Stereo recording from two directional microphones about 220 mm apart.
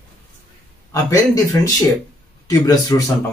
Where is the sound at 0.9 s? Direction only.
15° left (ahead or behind).